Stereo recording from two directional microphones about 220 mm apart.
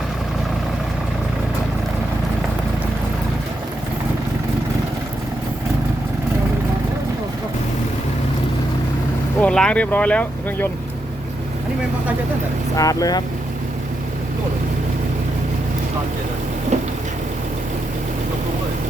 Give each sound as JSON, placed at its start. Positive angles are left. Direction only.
{"t": 9.4, "sound": "speech", "side_deg": 5}
{"t": 12.7, "sound": "speech", "side_deg": 15}